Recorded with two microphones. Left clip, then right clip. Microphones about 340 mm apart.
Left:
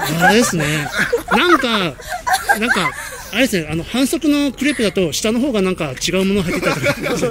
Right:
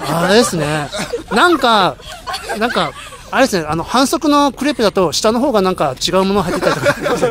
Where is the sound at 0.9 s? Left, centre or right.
Centre.